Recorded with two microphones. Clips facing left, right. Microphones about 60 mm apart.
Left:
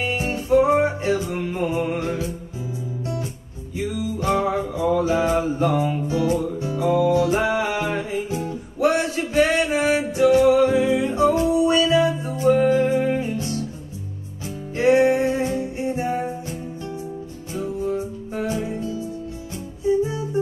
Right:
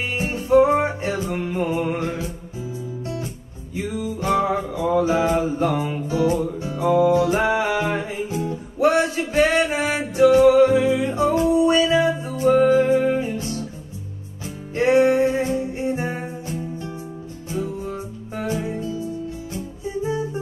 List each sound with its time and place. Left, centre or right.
0.2 s music: right
3.7 s music: right
14.8 s music: right
17.5 s music: right
18.8 s music: left